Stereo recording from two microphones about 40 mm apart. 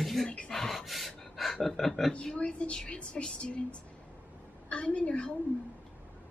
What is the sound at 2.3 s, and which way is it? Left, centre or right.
Speech, left.